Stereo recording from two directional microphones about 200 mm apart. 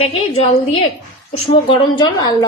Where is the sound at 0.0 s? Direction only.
25° left (ahead or behind).